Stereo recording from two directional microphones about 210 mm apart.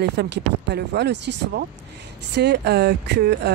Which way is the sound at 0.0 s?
55° right (ahead or behind).